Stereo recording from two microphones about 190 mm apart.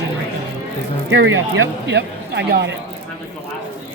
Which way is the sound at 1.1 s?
85° right.